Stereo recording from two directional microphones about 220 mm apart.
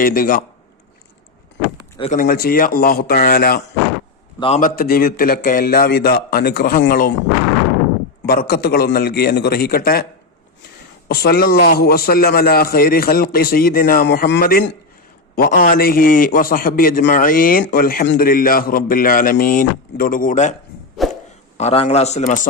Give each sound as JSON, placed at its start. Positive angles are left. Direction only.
{"t": 0.0, "sound": "a man's voice", "side_deg": 40}
{"t": 2.0, "sound": "a man's voice", "side_deg": 35}
{"t": 4.4, "sound": "a man's voice", "side_deg": 30}
{"t": 8.3, "sound": "a man's voice", "side_deg": 45}
{"t": 11.1, "sound": "a man's voice", "side_deg": 45}
{"t": 21.0, "sound": "a sound", "side_deg": 0}
{"t": 21.6, "sound": "a man's voice", "side_deg": 25}